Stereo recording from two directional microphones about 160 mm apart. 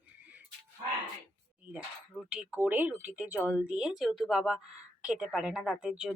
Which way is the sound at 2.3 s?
10° right (ahead or behind).